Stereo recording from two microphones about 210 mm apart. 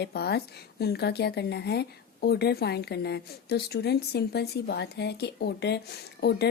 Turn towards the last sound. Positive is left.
turn(degrees=50)  # may be behind; listen again after turning